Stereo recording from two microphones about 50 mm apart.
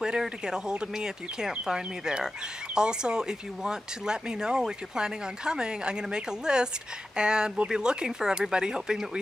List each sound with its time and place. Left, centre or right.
0.0 s speech: centre